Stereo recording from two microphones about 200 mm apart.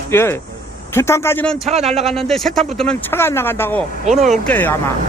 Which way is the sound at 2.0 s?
Centre (ahead or behind).